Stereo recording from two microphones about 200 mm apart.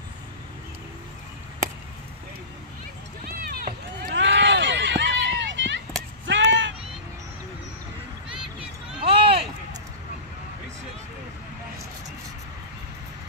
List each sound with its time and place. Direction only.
3.3 s run: 50° right (ahead or behind); by 5.8 s 65° right (ahead or behind)
6.2 s a sound: 65° right (ahead or behind)
8.5 s run: 30° right (ahead or behind)